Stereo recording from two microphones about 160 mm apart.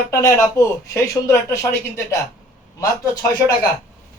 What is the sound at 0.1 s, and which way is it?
Speech, 20° left (ahead or behind).